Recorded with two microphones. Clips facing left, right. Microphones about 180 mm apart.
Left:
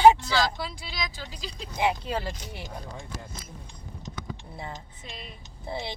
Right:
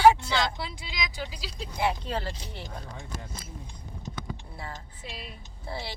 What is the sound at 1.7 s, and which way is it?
Speech, 15° left (ahead or behind).